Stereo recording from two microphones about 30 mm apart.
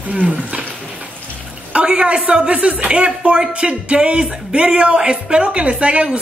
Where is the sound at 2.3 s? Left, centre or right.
Right.